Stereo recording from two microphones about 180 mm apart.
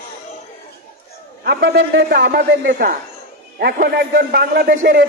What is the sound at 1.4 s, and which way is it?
A man's voice, 60° right (ahead or behind).